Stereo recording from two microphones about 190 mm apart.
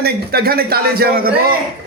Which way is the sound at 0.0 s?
55° right (ahead or behind).